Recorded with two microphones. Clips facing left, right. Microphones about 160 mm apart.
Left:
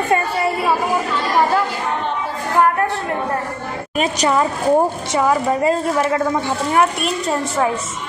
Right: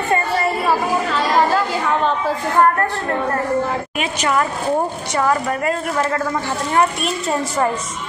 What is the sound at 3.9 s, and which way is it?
Speech, 35° left (ahead or behind).